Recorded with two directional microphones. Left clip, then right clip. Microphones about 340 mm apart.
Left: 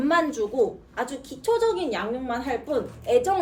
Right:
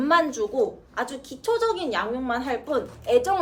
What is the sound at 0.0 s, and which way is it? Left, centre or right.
A woman's voice, centre.